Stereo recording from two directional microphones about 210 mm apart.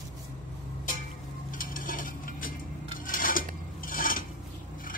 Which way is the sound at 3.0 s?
40° left (ahead or behind).